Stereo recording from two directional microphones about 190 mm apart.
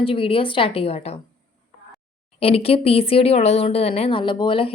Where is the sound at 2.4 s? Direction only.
30° left (ahead or behind).